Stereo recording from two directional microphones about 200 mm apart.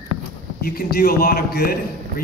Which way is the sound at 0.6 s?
50° left (ahead or behind).